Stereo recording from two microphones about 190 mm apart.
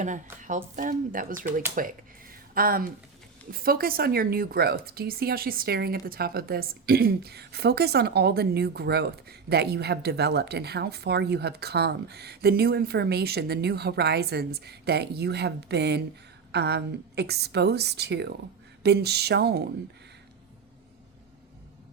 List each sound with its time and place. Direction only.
0.0 s speech: 40° right (ahead or behind)
1.7 s a sound: 50° right (ahead or behind)
3.5 s speech: 50° right (ahead or behind)